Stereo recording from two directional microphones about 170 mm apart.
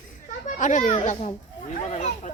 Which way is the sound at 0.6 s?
45° left (ahead or behind).